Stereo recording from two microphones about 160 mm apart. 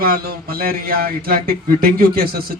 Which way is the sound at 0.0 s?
65° right (ahead or behind).